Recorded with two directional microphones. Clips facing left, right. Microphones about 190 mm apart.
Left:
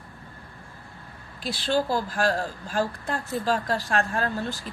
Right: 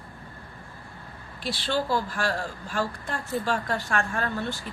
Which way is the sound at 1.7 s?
40° left (ahead or behind).